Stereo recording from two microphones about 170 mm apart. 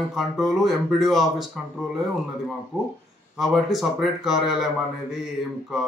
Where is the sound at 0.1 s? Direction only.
Centre (ahead or behind).